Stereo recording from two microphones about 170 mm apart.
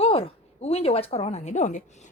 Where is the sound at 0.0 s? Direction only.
35° left (ahead or behind).